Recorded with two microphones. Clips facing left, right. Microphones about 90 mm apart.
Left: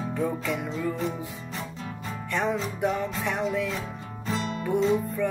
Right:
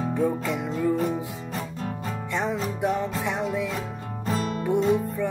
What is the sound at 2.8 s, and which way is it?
Music, 20° right (ahead or behind).